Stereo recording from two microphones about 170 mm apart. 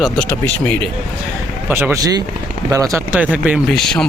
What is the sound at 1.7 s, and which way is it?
Speech, 15° right (ahead or behind).